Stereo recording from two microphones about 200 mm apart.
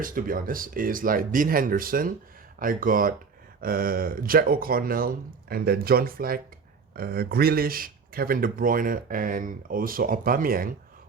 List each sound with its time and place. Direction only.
0.0 s speech: 45° right (ahead or behind)